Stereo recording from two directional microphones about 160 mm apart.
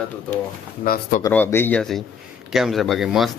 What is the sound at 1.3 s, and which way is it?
Speech, 15° left (ahead or behind).